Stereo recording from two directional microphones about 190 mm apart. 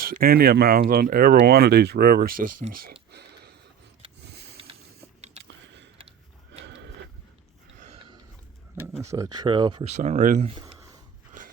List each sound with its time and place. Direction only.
0.0 s speech: 50° right (ahead or behind)
3.1 s a sound: 60° right (ahead or behind)
4.3 s sniff: 65° right (ahead or behind)
4.5 s vehicle: 30° right (ahead or behind)
5.4 s a sound: 70° right (ahead or behind)
6.7 s printer: 65° right (ahead or behind)
9.0 s speech: 15° right (ahead or behind)
9.9 s speech: 40° right (ahead or behind)
10.8 s a sound: 15° right (ahead or behind)